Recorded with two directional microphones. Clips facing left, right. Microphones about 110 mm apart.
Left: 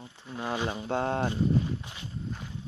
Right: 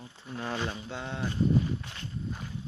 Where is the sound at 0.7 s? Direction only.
50° left (ahead or behind).